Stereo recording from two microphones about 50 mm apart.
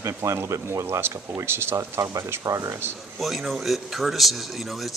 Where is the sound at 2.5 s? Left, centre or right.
Right.